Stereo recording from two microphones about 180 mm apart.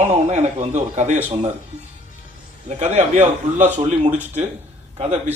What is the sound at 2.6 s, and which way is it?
A man's voice, 40° right (ahead or behind).